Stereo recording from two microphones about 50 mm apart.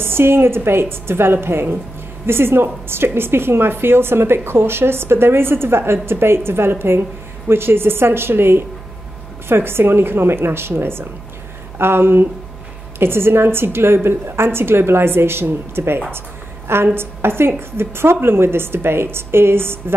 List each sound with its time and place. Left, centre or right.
0.0 s a woman's voice: right